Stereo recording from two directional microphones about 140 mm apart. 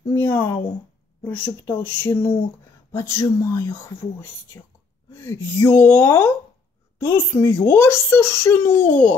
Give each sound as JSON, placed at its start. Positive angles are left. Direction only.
{"t": 0.1, "sound": "speech", "side_deg": 15}